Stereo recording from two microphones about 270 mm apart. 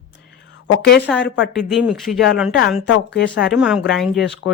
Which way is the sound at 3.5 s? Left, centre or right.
Centre.